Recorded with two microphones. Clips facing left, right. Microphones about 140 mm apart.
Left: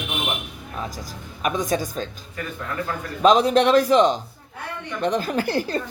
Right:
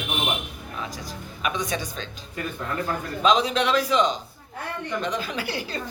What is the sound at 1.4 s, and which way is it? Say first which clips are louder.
Speech: left 5 dB; 45° left (ahead or behind).